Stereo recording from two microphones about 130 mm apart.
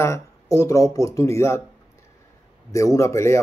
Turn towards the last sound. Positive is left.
turn(degrees=20)  # may be behind; listen again after turning